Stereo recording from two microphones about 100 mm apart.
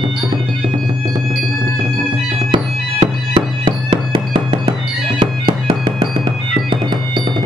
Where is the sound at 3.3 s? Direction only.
60° right (ahead or behind).